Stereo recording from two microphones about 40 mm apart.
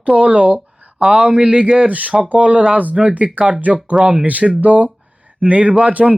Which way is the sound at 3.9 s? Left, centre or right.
Right.